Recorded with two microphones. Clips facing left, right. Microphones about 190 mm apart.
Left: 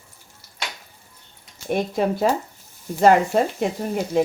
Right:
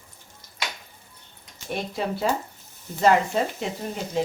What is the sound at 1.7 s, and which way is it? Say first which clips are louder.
Speech: left 7 dB; 50° left (ahead or behind).